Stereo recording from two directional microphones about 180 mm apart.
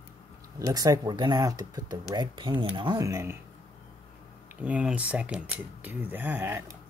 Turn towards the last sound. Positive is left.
turn(degrees=-15)  # may be behind; listen again after turning